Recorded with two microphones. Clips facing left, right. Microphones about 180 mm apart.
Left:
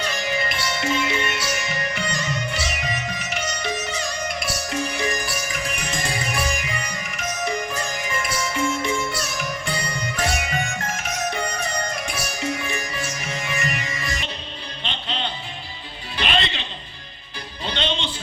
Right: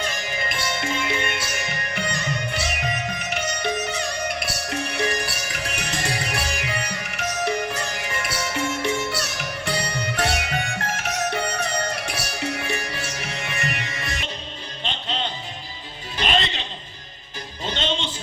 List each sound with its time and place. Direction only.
0.0 s music: 50° right (ahead or behind); by 14.3 s 65° right (ahead or behind)
14.8 s music: 45° right (ahead or behind)
17.7 s music: 45° right (ahead or behind)